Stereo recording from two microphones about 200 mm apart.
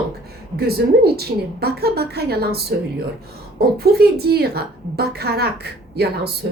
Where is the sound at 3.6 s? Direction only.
50° right (ahead or behind).